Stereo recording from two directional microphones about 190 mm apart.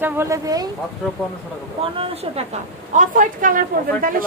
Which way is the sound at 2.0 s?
30° right (ahead or behind).